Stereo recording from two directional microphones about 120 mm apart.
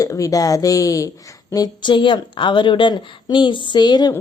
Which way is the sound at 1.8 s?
40° left (ahead or behind).